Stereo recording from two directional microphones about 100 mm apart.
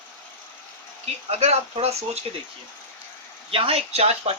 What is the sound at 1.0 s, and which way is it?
Speech, 90° right.